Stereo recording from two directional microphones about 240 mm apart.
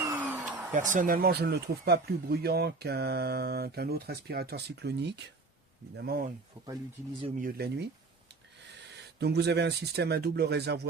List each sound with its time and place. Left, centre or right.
0.0 s a sound: centre
0.7 s speech: right
7.2 s speech: right
7.4 s speech: right
8.9 s speech: right